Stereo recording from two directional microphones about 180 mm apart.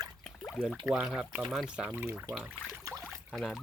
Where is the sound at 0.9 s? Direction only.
5° right (ahead or behind).